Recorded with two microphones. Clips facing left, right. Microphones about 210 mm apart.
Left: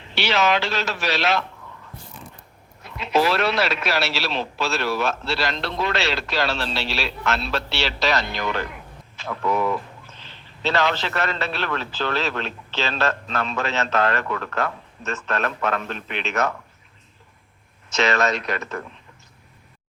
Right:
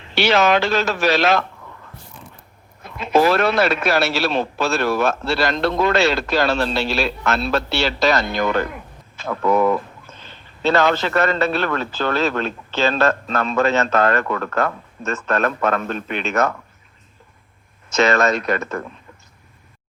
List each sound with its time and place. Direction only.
0.1 s speech: 50° right (ahead or behind)
2.8 s speech: 50° right (ahead or behind)
17.9 s speech: 45° right (ahead or behind)